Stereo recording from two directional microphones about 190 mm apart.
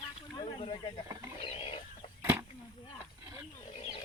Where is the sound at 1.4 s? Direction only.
30° left (ahead or behind).